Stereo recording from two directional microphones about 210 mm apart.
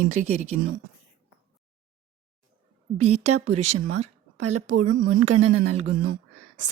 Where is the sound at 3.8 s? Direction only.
35° right (ahead or behind).